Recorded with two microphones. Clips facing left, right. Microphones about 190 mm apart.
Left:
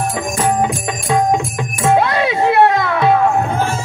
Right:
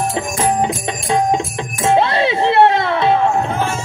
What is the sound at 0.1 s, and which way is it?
Music, 25° right (ahead or behind).